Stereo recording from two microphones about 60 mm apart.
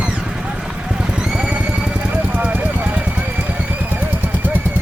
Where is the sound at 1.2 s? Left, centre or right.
Centre.